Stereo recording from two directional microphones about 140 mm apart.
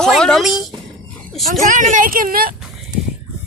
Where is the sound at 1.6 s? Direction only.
65° right (ahead or behind); by 2.5 s 90° right.